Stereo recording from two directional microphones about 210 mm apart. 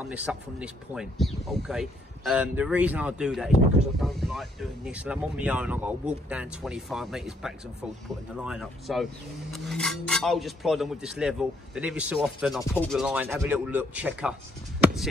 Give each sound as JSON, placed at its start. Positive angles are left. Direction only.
{"t": 0.1, "sound": "speech", "side_deg": -5}